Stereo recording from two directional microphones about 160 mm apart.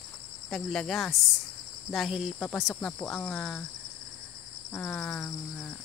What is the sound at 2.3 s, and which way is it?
Cricket, 10° left (ahead or behind).